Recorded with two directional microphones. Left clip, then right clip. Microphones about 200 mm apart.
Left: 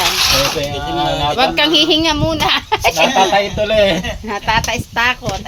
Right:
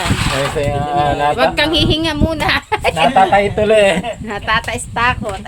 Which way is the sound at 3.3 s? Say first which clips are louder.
Right 2 dB; 50° right (ahead or behind).